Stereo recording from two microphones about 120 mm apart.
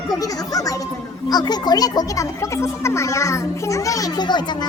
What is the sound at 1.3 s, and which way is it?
A child's voice, 35° left (ahead or behind).